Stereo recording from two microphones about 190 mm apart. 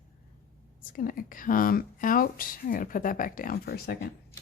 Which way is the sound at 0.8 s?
45° left (ahead or behind).